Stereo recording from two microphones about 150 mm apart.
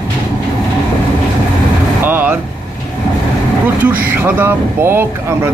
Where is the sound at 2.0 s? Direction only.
10° right (ahead or behind).